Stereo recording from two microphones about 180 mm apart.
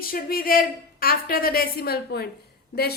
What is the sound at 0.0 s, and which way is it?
A woman's voice, 55° left (ahead or behind).